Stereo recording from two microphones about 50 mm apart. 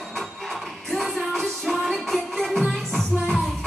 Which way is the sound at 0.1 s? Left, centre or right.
Centre.